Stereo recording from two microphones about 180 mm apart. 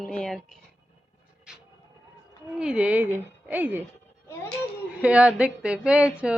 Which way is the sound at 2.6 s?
5° right (ahead or behind).